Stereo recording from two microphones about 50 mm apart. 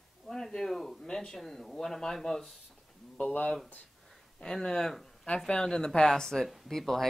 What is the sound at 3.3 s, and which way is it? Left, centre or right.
Speech, left.